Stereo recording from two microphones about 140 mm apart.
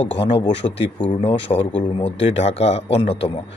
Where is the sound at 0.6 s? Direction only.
40° left (ahead or behind).